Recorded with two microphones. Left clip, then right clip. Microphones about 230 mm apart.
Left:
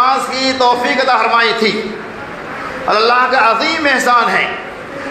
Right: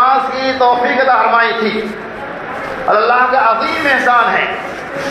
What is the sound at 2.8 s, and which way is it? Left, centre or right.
A man's voice, left.